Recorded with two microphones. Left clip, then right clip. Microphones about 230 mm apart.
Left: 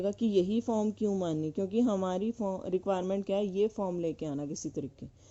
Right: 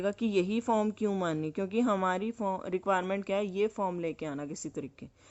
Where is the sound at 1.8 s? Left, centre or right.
Centre.